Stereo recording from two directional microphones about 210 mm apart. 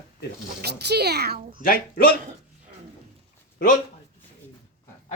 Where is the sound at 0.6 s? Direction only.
50° right (ahead or behind).